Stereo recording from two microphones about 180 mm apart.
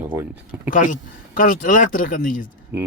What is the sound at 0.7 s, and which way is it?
Speech, 45° left (ahead or behind).